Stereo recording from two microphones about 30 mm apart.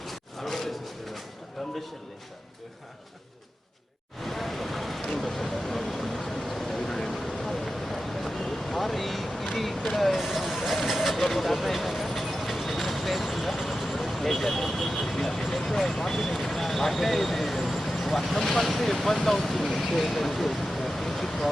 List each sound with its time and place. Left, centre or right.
0.0 s a sound: centre
4.2 s vehicle: centre
5.0 s speech: centre
5.4 s vehicle: centre
7.5 s a sound: centre
9.8 s speech: centre
10.8 s vehicle: centre
15.9 s a sound: centre
18.0 s speech: centre
19.7 s vehicle: centre